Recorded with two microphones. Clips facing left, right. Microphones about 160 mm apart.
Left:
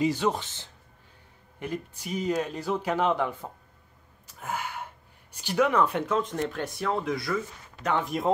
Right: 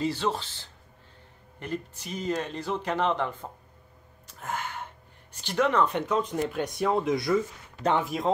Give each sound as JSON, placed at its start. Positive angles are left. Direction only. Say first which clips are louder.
{"t": 0.0, "sound": "speech", "louder": "left 3 dB", "side_deg": 15}
{"t": 6.5, "sound": "speech", "louder": "right 3 dB", "side_deg": -15}
{"t": 8.0, "sound": "speech", "louder": "left 1 dB", "side_deg": 0}